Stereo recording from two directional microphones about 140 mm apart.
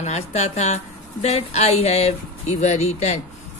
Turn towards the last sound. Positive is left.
turn(degrees=50)  # may be behind; listen again after turning